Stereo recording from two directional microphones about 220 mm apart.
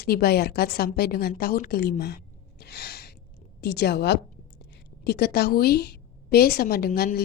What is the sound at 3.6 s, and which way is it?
A woman's voice, 50° left (ahead or behind).